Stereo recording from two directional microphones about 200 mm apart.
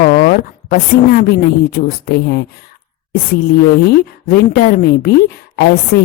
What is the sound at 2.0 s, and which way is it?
Speech, 55° left (ahead or behind).